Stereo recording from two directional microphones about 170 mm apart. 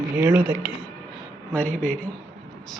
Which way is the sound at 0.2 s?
10° right (ahead or behind).